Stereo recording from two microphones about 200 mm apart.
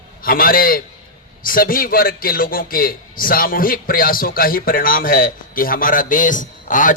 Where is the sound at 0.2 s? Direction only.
45° left (ahead or behind).